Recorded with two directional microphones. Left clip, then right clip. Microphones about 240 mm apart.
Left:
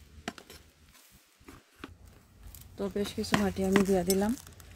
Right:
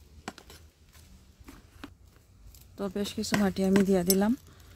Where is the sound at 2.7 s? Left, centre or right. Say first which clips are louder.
Even; right.